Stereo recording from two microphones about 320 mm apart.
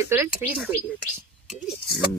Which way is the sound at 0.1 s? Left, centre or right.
Centre.